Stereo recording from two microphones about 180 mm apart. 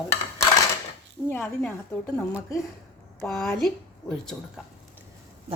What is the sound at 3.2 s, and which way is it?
Speech, 5° left (ahead or behind).